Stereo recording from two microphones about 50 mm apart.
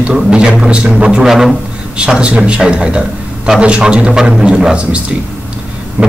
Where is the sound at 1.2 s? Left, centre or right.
Centre.